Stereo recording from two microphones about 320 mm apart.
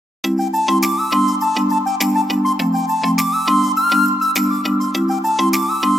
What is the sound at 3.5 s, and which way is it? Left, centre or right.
Music, centre.